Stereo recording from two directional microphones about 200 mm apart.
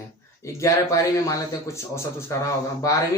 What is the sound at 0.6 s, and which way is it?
A man's voice, 15° left (ahead or behind).